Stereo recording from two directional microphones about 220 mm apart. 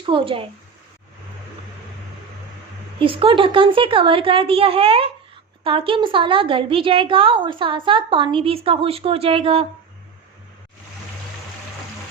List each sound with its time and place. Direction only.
0.0 s a woman's voice: 25° right (ahead or behind)
3.0 s a woman's voice: 25° right (ahead or behind)